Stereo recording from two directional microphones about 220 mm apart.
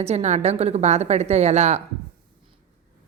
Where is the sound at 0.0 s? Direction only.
30° right (ahead or behind).